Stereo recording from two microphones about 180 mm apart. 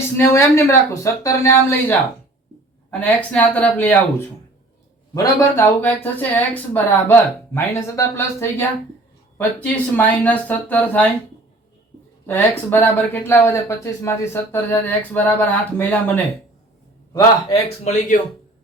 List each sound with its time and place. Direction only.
0.2 s speech: 15° left (ahead or behind)
5.1 s speech: 15° left (ahead or behind)
12.2 s speech: 10° left (ahead or behind)
17.5 s speech: 40° left (ahead or behind)